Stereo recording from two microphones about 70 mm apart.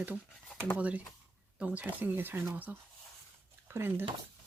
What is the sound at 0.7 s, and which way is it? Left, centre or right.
Speech, centre.